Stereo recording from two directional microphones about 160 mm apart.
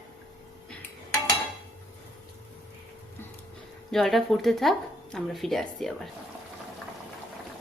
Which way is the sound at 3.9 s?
Centre (ahead or behind).